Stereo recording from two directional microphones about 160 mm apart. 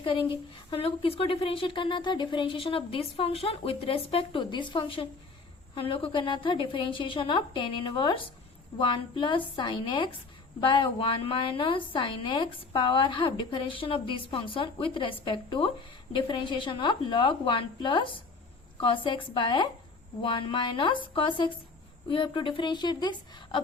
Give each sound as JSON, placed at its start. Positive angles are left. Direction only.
{"t": 0.7, "sound": "a woman's voice", "side_deg": 35}